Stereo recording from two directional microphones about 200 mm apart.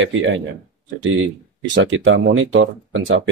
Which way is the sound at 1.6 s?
70° right (ahead or behind).